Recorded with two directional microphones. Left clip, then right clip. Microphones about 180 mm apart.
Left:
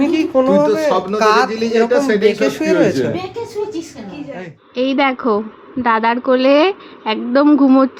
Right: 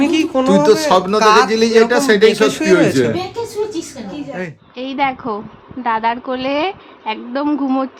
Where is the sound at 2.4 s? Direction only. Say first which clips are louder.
Right 1 dB; 15° left (ahead or behind).